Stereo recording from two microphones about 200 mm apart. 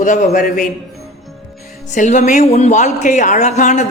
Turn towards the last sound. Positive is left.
turn(degrees=35)  # may be behind; listen again after turning